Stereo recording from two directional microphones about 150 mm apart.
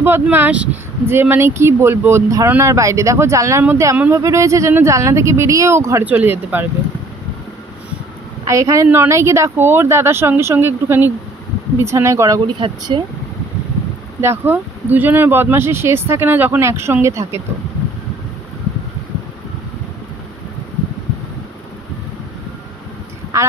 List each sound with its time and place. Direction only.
0.0 s speech: 15° right (ahead or behind)
8.5 s speech: 20° right (ahead or behind)
12.5 s speech: 35° right (ahead or behind)
14.2 s speech: 15° right (ahead or behind)